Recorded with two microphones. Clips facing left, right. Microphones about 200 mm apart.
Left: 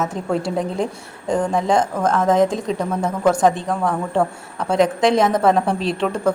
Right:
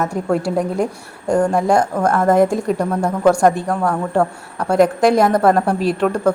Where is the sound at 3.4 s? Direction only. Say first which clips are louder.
Right 2 dB; 5° right (ahead or behind).